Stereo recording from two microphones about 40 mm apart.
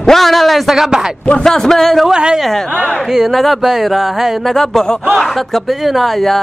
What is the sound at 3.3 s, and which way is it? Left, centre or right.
Speech, centre.